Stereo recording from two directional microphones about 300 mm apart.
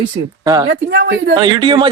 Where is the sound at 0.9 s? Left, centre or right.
Right.